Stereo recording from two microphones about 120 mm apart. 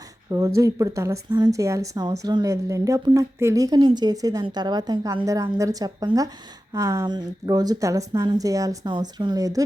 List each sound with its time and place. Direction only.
0.3 s a woman's voice: 30° right (ahead or behind)